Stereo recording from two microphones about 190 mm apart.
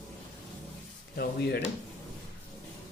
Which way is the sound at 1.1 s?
60° left (ahead or behind).